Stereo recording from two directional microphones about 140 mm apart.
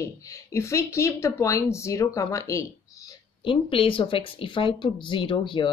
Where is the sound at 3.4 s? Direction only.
40° left (ahead or behind).